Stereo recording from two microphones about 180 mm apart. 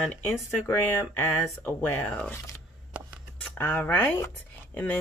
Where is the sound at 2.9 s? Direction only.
5° right (ahead or behind).